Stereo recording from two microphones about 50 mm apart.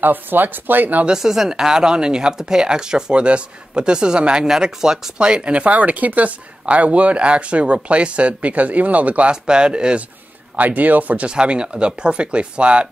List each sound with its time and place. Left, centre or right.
0.0 s speech: right
1.0 s speech: centre
5.2 s speech: right
9.3 s speech: centre
10.5 s speech: right
11.2 s speech: centre